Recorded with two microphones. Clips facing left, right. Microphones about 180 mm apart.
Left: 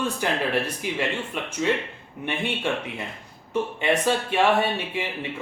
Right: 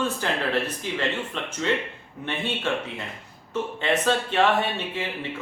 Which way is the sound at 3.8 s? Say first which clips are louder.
Even; 10° left (ahead or behind).